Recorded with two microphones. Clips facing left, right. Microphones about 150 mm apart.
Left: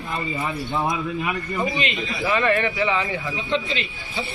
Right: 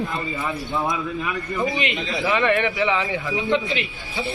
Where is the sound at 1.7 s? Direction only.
20° right (ahead or behind).